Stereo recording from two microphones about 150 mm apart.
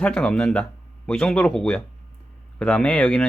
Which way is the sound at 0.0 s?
5° left (ahead or behind).